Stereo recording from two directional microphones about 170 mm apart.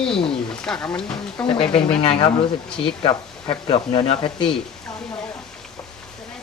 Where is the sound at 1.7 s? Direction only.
35° left (ahead or behind).